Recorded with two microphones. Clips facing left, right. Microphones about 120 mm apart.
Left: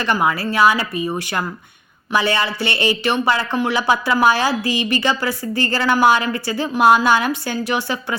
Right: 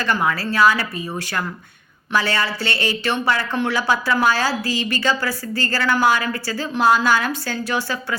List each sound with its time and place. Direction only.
0.0 s a woman's voice: 15° left (ahead or behind)